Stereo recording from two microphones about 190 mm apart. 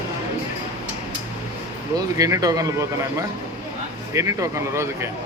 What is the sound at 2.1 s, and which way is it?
Speech, 15° right (ahead or behind).